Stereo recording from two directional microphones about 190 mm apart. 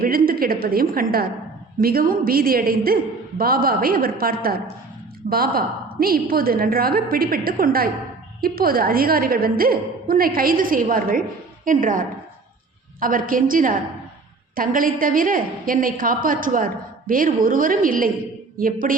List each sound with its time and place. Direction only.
0.0 s a woman's voice: 50° right (ahead or behind)